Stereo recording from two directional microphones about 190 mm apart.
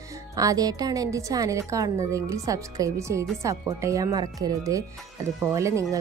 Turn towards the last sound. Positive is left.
turn(degrees=-15)  # may be behind; listen again after turning